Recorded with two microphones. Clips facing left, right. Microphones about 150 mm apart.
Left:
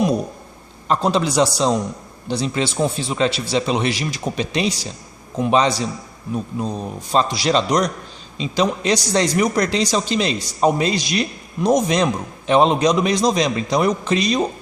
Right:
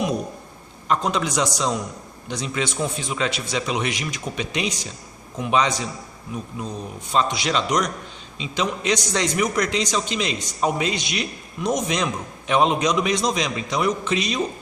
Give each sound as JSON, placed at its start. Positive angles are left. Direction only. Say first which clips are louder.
{"t": 0.9, "sound": "a man's voice", "louder": "left 4 dB", "side_deg": 30}